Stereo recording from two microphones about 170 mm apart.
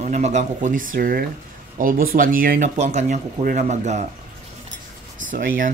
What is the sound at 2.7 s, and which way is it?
Speech, 40° right (ahead or behind).